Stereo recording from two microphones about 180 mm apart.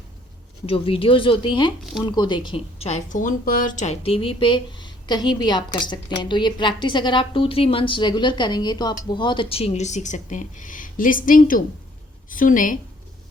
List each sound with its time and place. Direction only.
0.6 s a woman's voice: 30° left (ahead or behind); by 12.8 s 45° left (ahead or behind)